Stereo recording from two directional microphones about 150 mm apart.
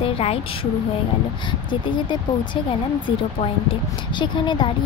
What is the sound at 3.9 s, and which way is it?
Speech, 30° left (ahead or behind).